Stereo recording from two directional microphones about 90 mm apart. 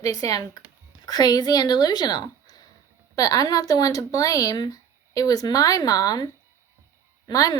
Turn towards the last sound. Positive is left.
turn(degrees=45)  # may be behind; listen again after turning